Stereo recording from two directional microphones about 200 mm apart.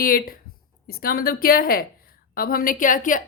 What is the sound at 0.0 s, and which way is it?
Speech, 45° left (ahead or behind).